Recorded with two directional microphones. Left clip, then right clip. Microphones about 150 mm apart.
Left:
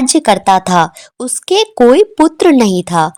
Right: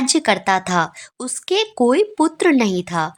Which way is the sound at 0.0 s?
25° left (ahead or behind).